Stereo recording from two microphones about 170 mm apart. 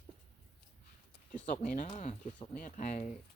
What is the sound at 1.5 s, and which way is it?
Speech, 50° left (ahead or behind).